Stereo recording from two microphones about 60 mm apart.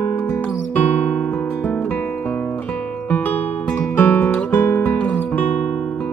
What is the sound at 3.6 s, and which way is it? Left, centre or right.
Music, centre.